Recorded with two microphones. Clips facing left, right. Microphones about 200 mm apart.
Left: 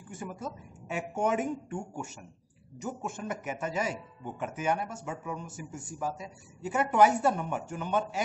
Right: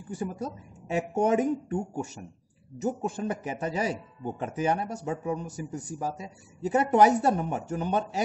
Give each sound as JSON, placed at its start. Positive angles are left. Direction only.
{"t": 0.1, "sound": "speech", "side_deg": -35}